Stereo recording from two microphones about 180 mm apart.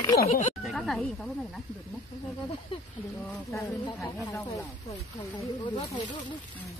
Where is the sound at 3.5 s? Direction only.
20° left (ahead or behind).